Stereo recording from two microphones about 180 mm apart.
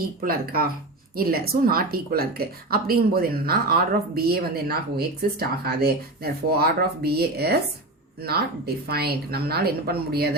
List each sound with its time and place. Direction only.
0.0 s a woman's voice: 55° right (ahead or behind)